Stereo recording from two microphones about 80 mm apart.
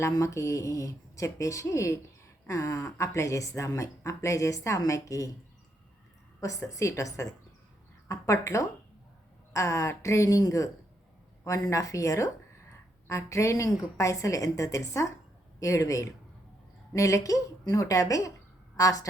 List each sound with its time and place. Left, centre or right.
0.0 s a woman's voice: left
6.4 s a woman's voice: left